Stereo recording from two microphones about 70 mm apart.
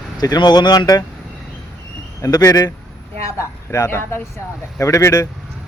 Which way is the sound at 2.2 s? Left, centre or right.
Left.